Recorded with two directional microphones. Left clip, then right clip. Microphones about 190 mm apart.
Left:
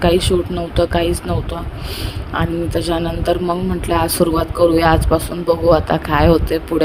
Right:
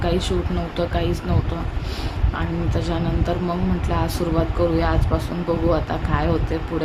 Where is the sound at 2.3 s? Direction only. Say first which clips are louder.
Left 8 dB; 45° left (ahead or behind).